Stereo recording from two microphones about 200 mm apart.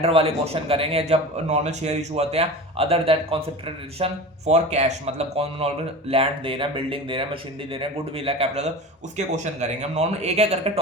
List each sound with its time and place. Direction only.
0.0 s speech: 30° right (ahead or behind)